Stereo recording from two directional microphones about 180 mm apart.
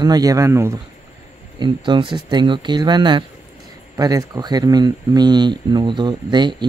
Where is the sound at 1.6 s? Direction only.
25° right (ahead or behind).